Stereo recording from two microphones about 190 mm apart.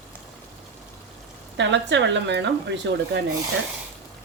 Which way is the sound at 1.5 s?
70° right (ahead or behind).